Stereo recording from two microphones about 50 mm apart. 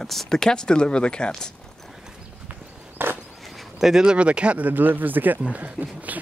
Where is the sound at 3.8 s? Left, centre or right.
Centre.